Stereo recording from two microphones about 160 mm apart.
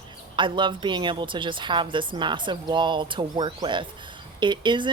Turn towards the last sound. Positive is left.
turn(degrees=-30)  # may be behind; listen again after turning